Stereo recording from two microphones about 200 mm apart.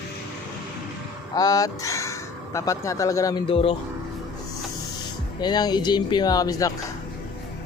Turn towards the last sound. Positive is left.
turn(degrees=20)  # may be behind; listen again after turning